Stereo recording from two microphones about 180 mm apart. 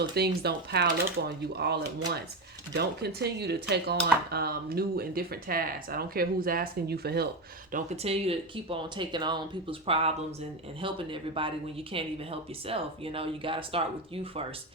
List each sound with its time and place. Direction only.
0.1 s speech: 65° right (ahead or behind)
7.7 s speech: 35° right (ahead or behind)